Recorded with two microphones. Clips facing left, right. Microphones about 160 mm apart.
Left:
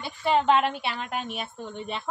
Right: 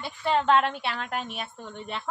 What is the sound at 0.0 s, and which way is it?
Speech, 10° left (ahead or behind).